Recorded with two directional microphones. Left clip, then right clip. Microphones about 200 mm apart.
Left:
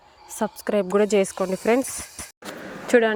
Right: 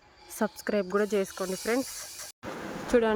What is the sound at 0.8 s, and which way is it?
Speech, 10° left (ahead or behind).